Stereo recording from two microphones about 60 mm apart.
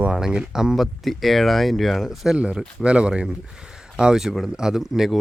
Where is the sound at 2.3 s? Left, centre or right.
Centre.